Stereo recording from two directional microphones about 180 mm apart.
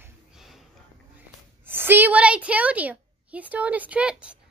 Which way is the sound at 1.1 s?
10° right (ahead or behind).